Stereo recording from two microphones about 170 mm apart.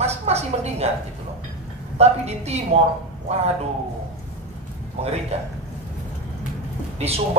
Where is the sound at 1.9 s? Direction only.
40° right (ahead or behind).